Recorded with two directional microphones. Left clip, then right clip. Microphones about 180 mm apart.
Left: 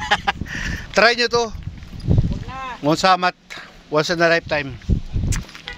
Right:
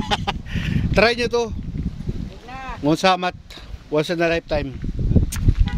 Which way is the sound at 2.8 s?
20° right (ahead or behind).